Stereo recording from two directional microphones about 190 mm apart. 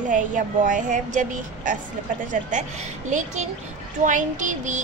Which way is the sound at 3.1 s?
40° right (ahead or behind).